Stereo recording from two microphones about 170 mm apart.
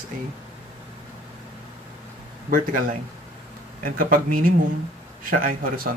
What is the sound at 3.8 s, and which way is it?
Speech, 55° right (ahead or behind).